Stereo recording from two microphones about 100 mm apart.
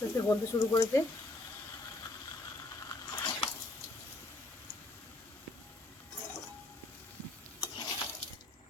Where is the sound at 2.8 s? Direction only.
35° left (ahead or behind).